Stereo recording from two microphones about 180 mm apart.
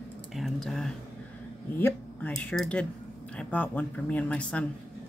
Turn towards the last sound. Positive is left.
turn(degrees=5)  # may be behind; listen again after turning